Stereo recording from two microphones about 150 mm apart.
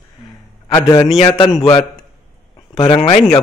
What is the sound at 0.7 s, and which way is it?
A man's voice, 25° left (ahead or behind).